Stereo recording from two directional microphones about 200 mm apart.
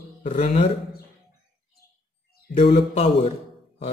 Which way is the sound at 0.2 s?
35° left (ahead or behind).